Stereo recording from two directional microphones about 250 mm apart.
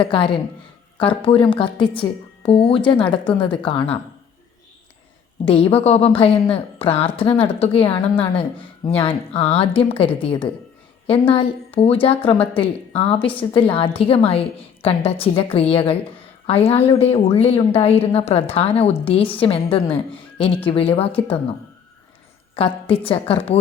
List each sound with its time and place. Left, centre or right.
0.0 s a woman's voice: left
5.5 s a woman's voice: left
22.5 s a woman's voice: left